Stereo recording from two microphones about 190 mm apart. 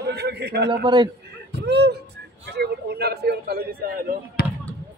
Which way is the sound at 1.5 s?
60° right (ahead or behind).